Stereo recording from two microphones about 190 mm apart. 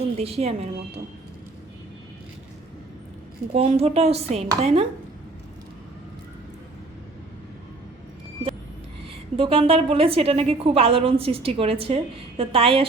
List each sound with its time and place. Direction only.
0.2 s a woman's voice: 30° right (ahead or behind)
3.5 s a woman's voice: 30° right (ahead or behind)
9.3 s a woman's voice: 30° right (ahead or behind)